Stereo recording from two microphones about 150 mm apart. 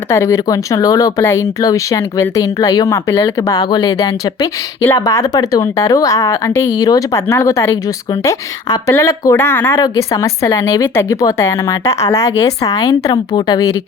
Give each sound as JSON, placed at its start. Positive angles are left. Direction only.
{"t": 0.1, "sound": "speech", "side_deg": 20}
{"t": 4.8, "sound": "speech", "side_deg": 15}
{"t": 5.0, "sound": "speech", "side_deg": 25}